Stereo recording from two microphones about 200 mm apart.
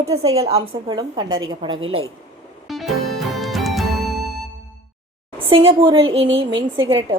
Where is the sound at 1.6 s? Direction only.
25° right (ahead or behind).